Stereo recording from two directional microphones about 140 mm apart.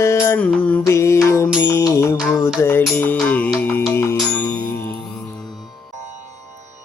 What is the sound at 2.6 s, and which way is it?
Mantra, 15° left (ahead or behind).